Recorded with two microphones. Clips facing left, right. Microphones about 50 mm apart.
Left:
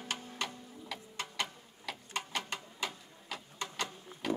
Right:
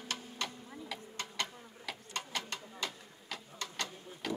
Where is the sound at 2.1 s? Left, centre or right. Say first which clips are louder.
Left 2 dB; centre.